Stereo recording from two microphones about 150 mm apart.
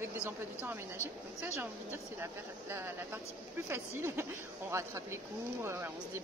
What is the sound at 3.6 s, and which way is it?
A woman's voice, 15° right (ahead or behind).